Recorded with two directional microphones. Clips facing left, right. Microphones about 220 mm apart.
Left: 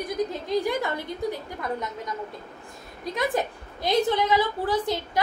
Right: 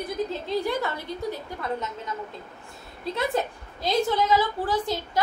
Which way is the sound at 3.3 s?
15° left (ahead or behind).